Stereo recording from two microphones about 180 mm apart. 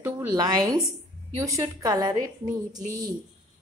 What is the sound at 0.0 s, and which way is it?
A woman's voice, 20° right (ahead or behind).